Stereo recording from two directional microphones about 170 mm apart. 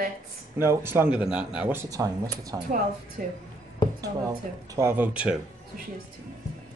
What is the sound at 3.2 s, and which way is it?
Speech, 55° right (ahead or behind).